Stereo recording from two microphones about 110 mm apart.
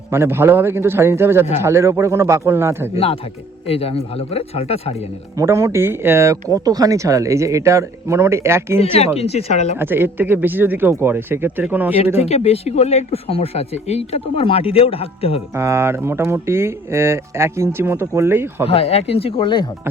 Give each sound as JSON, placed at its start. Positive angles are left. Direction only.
{"t": 0.1, "sound": "speech", "side_deg": -20}
{"t": 2.9, "sound": "speech", "side_deg": 65}
{"t": 5.4, "sound": "speech", "side_deg": -25}
{"t": 8.8, "sound": "speech", "side_deg": 70}
{"t": 9.7, "sound": "speech", "side_deg": -20}
{"t": 12.1, "sound": "speech", "side_deg": 70}
{"t": 15.5, "sound": "speech", "side_deg": -25}
{"t": 18.7, "sound": "speech", "side_deg": 65}